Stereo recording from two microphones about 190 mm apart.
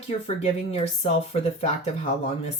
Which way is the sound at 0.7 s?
35° left (ahead or behind).